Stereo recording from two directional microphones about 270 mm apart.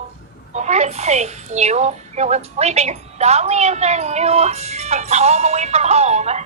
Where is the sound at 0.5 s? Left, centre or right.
Right.